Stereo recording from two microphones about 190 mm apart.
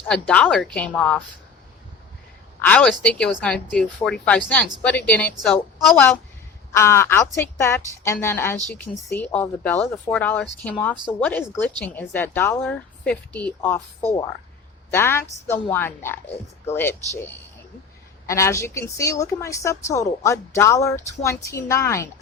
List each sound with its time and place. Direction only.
0.1 s a woman's voice: 5° left (ahead or behind)
2.6 s a woman's voice: 5° left (ahead or behind)
6.7 s a woman's voice: 15° left (ahead or behind)
18.3 s a woman's voice: 15° left (ahead or behind)